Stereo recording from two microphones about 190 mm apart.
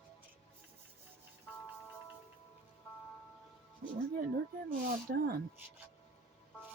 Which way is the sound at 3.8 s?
50° right (ahead or behind).